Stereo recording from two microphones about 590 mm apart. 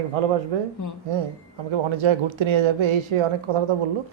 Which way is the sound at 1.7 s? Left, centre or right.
Right.